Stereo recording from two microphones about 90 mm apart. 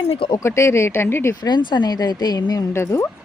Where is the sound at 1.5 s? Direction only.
55° left (ahead or behind).